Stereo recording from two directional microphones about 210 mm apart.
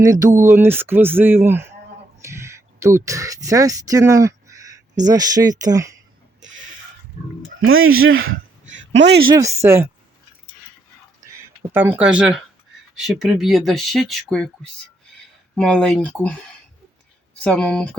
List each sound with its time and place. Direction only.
0.0 s speech: 15° right (ahead or behind)
7.6 s speech: 75° right (ahead or behind); by 9.1 s 60° right (ahead or behind)
9.2 s speech: 15° right (ahead or behind)
11.7 s speech: 10° right (ahead or behind)
17.4 s speech: 5° left (ahead or behind)